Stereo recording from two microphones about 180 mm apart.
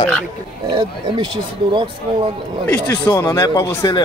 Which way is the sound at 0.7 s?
30° right (ahead or behind).